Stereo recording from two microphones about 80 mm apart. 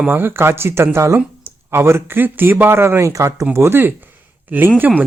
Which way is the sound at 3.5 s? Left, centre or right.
Right.